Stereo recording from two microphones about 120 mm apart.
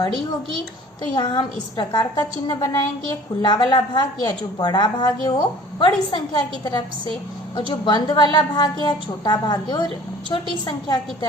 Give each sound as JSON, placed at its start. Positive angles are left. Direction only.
{"t": 1.1, "sound": "a woman's voice", "side_deg": 40}